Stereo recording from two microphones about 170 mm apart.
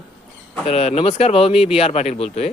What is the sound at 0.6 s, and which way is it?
Speech, 35° left (ahead or behind).